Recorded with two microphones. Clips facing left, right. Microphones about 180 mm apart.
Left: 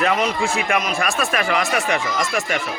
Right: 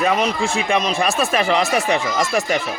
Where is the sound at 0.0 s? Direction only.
20° right (ahead or behind).